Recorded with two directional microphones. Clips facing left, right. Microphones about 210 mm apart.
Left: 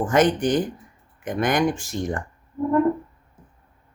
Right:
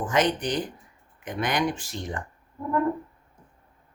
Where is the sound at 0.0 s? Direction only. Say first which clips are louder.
Left 5 dB; 50° left (ahead or behind).